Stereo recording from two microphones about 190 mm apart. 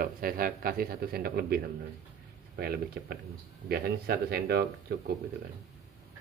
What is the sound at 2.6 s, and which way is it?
Speech, 55° right (ahead or behind).